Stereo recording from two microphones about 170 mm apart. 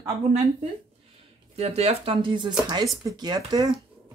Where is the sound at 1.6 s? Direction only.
35° right (ahead or behind).